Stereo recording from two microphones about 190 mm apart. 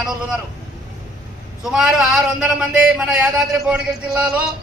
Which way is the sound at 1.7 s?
5° right (ahead or behind).